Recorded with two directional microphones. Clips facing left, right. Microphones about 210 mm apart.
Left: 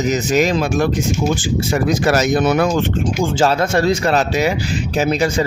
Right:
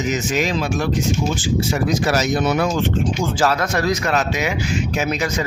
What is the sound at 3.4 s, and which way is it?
A man's voice, 30° left (ahead or behind).